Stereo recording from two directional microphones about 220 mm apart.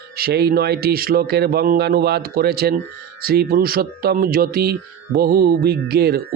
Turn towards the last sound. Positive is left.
turn(degrees=-45)  # may be behind; listen again after turning